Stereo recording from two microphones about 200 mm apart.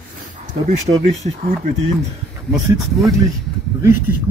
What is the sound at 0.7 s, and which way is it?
Speech, 35° right (ahead or behind).